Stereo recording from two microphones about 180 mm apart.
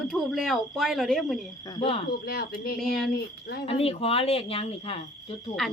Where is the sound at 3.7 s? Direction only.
30° left (ahead or behind).